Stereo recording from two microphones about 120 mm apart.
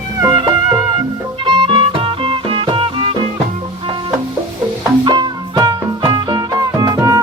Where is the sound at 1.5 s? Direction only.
45° right (ahead or behind).